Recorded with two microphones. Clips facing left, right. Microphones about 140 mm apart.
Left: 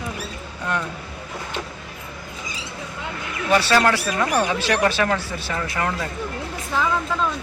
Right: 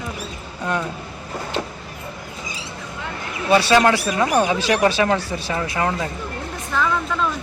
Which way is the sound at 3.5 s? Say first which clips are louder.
Right 3 dB; 15° right (ahead or behind).